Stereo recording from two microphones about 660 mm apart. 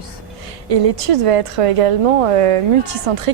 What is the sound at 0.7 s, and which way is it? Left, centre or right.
A woman's voice, right.